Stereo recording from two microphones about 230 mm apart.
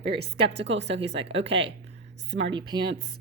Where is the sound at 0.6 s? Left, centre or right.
Right.